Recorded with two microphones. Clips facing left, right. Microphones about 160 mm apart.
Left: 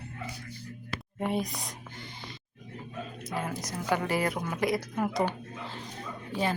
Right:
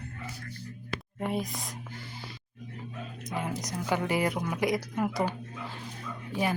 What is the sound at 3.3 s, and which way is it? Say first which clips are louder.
A woman's voice: right 1 dB; 15° right (ahead or behind).